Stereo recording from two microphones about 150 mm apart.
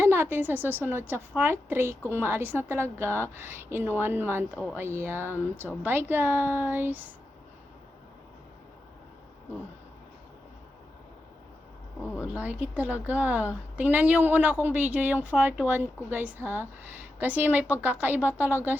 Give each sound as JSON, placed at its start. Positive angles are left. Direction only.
{"t": 0.0, "sound": "a woman's voice", "side_deg": -15}
{"t": 12.2, "sound": "a woman's voice", "side_deg": -10}